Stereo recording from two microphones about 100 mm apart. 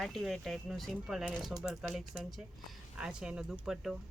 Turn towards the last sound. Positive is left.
turn(degrees=-5)  # may be behind; listen again after turning